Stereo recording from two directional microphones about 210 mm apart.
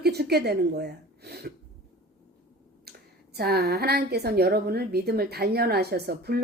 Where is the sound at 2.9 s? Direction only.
50° right (ahead or behind).